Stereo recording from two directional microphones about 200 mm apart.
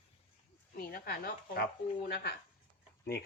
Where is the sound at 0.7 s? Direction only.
50° left (ahead or behind).